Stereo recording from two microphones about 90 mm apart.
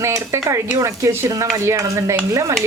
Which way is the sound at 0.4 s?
35° right (ahead or behind).